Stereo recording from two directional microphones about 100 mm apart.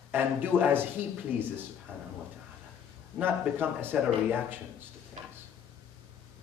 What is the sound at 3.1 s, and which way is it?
A man's voice, 20° right (ahead or behind).